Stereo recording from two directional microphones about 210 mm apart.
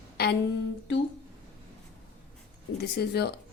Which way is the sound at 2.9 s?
50° left (ahead or behind).